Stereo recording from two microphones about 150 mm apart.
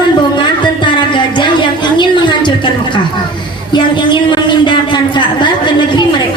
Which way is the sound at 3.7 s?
30° left (ahead or behind).